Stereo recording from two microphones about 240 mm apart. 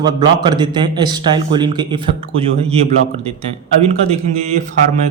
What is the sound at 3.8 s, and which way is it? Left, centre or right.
Speech, right.